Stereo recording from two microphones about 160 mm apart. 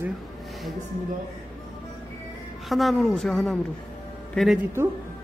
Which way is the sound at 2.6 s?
Centre (ahead or behind).